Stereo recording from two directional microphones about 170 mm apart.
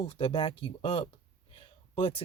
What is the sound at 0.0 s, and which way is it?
Speech, 30° left (ahead or behind).